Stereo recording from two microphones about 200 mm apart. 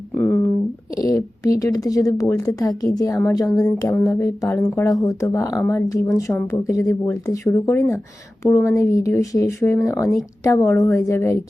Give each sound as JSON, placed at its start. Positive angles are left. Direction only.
{"t": 0.9, "sound": "speech", "side_deg": 15}